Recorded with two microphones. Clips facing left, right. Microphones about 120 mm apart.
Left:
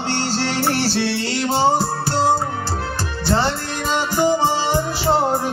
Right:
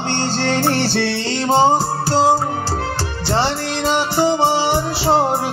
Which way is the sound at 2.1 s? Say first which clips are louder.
Right 4 dB; 90° right.